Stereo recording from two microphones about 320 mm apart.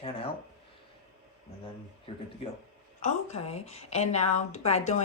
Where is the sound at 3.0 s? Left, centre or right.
Centre.